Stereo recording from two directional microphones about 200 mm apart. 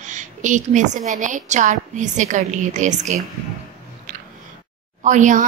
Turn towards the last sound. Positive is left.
turn(degrees=-40)  # may be behind; listen again after turning